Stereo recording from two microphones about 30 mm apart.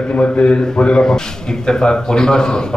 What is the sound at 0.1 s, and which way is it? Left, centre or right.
Speech, left.